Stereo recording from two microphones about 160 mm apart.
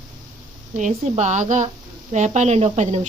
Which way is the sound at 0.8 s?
45° right (ahead or behind).